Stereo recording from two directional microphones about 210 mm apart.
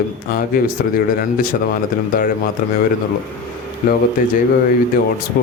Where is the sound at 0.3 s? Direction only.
45° left (ahead or behind).